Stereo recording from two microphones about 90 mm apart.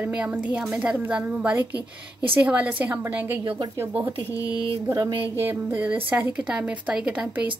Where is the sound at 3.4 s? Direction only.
65° right (ahead or behind).